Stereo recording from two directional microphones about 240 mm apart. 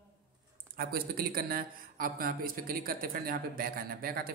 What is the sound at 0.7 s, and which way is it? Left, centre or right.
Speech, right.